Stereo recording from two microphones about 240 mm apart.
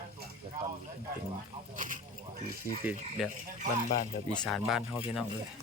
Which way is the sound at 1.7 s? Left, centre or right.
Right.